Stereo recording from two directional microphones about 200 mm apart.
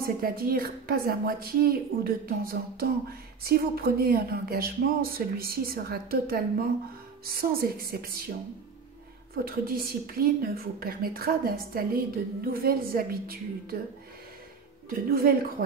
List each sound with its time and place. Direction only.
0.0 s a woman's voice: 50° right (ahead or behind)
9.3 s a woman's voice: 50° right (ahead or behind)
14.9 s a woman's voice: 50° right (ahead or behind)